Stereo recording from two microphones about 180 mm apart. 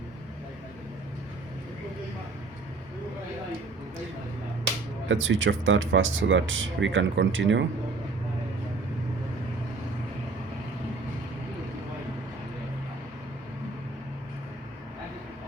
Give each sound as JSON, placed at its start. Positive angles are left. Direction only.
{"t": 5.0, "sound": "speech", "side_deg": -90}